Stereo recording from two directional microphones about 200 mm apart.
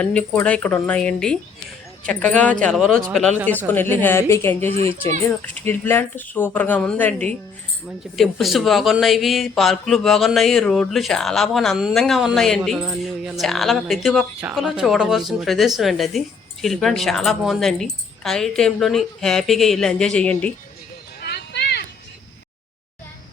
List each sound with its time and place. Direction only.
0.0 s speech: 5° left (ahead or behind)
21.2 s clip-clop: 55° left (ahead or behind)